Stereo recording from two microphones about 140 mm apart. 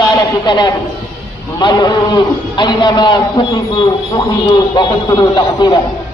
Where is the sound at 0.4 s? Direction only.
30° left (ahead or behind).